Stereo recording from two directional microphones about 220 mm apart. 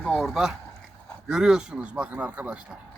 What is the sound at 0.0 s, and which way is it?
Speech, centre (ahead or behind).